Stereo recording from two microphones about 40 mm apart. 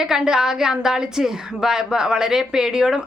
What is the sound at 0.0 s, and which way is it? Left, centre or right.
A woman's voice, centre.